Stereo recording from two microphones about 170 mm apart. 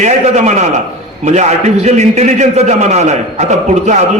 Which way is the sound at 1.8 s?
40° right (ahead or behind).